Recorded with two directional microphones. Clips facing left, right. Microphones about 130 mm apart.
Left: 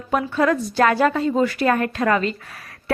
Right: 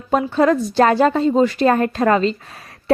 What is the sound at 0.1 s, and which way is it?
Speech, 25° right (ahead or behind).